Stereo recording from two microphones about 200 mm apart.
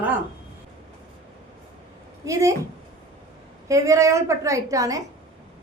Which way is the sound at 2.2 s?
15° right (ahead or behind).